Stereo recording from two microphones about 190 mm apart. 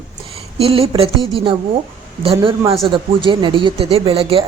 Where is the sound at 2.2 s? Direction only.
30° right (ahead or behind).